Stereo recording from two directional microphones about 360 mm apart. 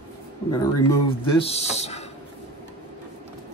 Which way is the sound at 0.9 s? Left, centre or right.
Centre.